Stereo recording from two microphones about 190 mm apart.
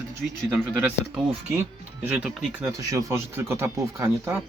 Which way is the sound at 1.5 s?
10° right (ahead or behind).